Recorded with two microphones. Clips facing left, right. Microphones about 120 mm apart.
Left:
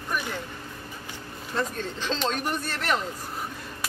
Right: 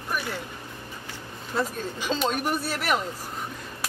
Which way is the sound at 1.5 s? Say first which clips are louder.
Right 1 dB; 10° right (ahead or behind).